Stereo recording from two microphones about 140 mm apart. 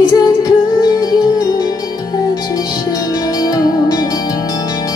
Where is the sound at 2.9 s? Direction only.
25° left (ahead or behind).